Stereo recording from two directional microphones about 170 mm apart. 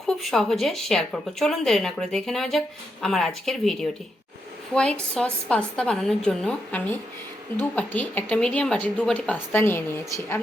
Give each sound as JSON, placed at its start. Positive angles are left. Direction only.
{"t": 0.2, "sound": "a woman's voice", "side_deg": 0}